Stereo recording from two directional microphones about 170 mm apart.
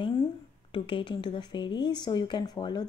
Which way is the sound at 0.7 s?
30° left (ahead or behind).